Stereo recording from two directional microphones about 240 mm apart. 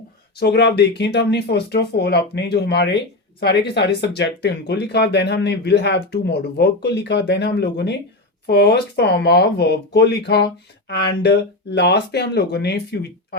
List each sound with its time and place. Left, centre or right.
0.3 s speech: left